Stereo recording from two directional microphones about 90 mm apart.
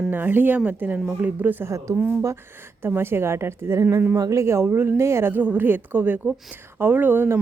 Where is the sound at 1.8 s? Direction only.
35° right (ahead or behind).